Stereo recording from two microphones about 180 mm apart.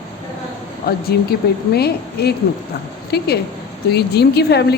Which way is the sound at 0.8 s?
60° left (ahead or behind).